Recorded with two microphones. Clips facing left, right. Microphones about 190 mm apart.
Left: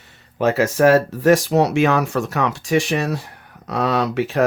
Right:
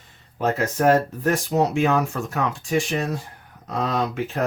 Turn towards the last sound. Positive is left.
turn(degrees=80)